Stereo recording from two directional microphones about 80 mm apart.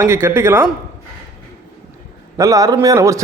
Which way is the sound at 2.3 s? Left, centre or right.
Right.